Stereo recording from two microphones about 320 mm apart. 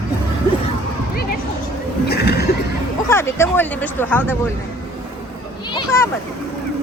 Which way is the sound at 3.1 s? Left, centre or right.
Centre.